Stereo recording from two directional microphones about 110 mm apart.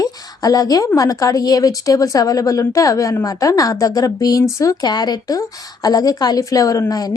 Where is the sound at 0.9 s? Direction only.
35° left (ahead or behind).